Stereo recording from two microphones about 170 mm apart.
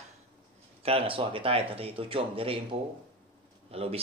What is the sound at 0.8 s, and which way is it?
Speech, 35° right (ahead or behind).